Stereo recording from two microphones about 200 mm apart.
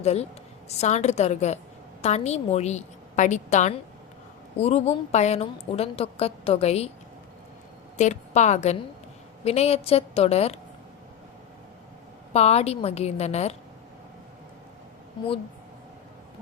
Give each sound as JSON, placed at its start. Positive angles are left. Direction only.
{"t": 0.0, "sound": "a woman's voice", "side_deg": 30}
{"t": 7.9, "sound": "a woman's voice", "side_deg": 35}
{"t": 12.3, "sound": "a woman's voice", "side_deg": 30}